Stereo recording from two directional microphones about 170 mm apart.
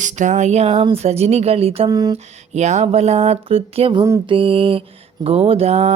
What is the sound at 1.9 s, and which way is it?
Speech, 25° right (ahead or behind).